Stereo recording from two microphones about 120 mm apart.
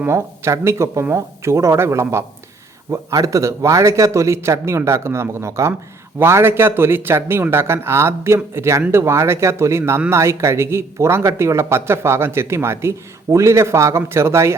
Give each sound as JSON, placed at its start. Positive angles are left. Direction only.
{"t": 0.0, "sound": "speech", "side_deg": -25}